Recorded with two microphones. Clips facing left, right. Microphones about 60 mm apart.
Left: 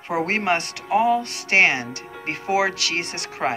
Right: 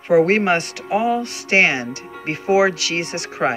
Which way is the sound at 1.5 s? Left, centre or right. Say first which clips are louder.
Right 2 dB; right.